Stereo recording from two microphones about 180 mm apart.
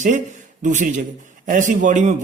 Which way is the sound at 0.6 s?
45° right (ahead or behind).